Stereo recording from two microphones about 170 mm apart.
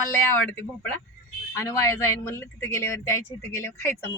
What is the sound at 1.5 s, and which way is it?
Speech, 15° left (ahead or behind).